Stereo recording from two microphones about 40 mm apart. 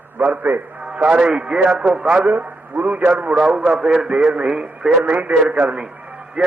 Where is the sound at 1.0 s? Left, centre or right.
Right.